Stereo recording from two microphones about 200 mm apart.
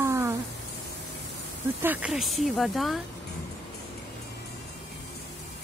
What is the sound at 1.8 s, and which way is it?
Speech, 10° right (ahead or behind).